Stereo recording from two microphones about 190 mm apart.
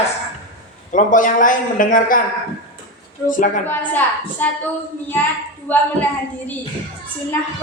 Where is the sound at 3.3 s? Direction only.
45° left (ahead or behind).